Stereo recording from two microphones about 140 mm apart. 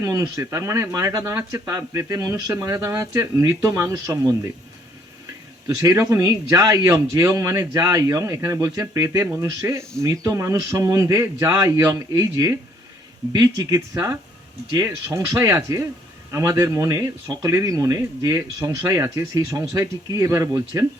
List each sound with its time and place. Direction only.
0.0 s speech: 20° right (ahead or behind)
5.6 s speech: 20° right (ahead or behind)